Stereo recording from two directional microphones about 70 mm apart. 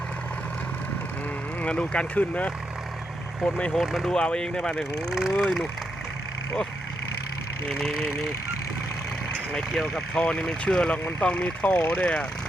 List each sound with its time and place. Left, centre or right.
1.6 s speech: centre
3.4 s speech: centre
7.7 s speech: centre
9.9 s speech: centre